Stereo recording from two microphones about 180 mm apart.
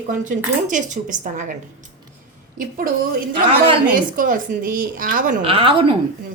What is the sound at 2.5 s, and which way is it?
A woman's voice, 50° right (ahead or behind).